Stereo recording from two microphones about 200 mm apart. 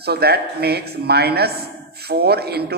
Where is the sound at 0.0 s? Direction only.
55° right (ahead or behind).